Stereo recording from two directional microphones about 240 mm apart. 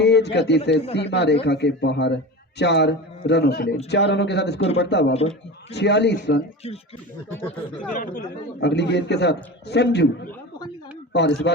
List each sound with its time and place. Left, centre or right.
0.0 s a man's voice: left
7.9 s speech: left
8.6 s a man's voice: left
11.1 s a man's voice: left